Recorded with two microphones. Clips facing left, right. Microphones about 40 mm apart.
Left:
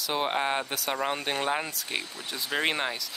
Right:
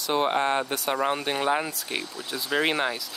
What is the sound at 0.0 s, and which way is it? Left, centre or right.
Speech, centre.